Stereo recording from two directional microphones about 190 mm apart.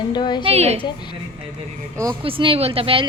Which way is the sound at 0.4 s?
35° right (ahead or behind).